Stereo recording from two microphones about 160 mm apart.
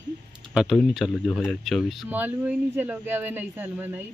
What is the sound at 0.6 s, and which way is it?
Speech, centre (ahead or behind).